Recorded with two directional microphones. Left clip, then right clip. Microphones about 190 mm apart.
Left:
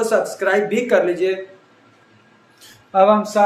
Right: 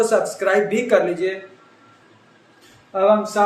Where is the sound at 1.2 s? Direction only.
25° left (ahead or behind).